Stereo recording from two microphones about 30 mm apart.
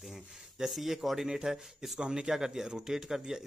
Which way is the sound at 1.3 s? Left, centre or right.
Right.